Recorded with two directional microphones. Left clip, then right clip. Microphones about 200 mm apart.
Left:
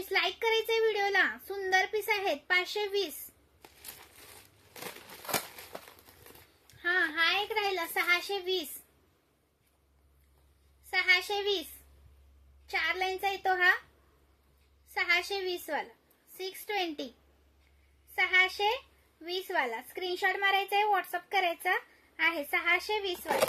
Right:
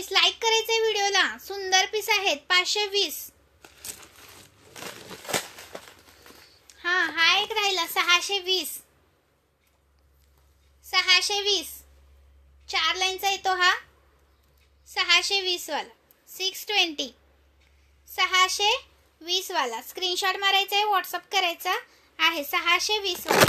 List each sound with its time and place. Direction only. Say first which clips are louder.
0.1 s a child's voice: right 7 dB; 15° left (ahead or behind)
4.7 s crumpling: right 5 dB; 20° right (ahead or behind)
6.7 s a child's voice: right 4 dB; 15° left (ahead or behind)
10.9 s a child's voice: right 6 dB; 15° left (ahead or behind)
12.6 s a child's voice: right 6 dB; 15° left (ahead or behind)
15.0 s a child's voice: right 7 dB; 15° left (ahead or behind)
18.1 s a child's voice: right 4 dB; 10° left (ahead or behind)